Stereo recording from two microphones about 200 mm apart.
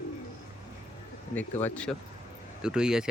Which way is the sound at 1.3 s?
5° left (ahead or behind).